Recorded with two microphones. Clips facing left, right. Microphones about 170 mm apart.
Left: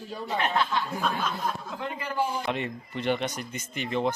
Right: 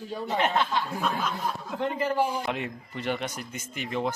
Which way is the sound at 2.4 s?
5° right (ahead or behind).